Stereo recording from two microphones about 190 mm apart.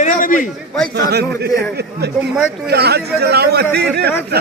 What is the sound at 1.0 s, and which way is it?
Speech, 60° right (ahead or behind).